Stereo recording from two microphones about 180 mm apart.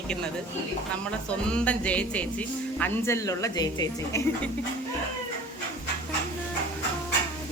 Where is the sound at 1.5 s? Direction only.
5° left (ahead or behind).